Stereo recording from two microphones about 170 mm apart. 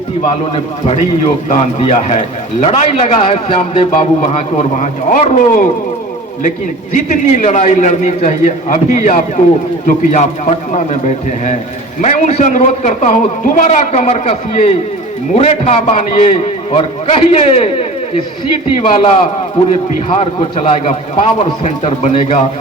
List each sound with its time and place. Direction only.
0.5 s a man's voice: 40° left (ahead or behind)
6.9 s a man's voice: 50° left (ahead or behind)